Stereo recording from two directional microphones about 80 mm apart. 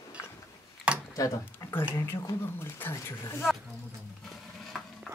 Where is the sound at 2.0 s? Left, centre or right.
Left.